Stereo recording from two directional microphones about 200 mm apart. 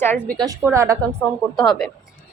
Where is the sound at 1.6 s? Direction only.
Centre (ahead or behind).